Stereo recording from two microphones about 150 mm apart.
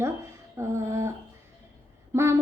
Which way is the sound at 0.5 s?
20° right (ahead or behind).